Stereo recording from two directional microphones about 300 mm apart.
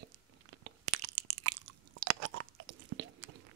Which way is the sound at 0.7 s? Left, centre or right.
Right.